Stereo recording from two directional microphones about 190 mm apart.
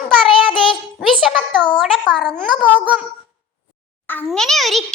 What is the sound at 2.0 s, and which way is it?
Speech, 5° left (ahead or behind).